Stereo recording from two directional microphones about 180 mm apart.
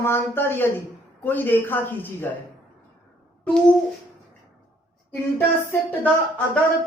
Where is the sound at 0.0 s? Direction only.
15° left (ahead or behind).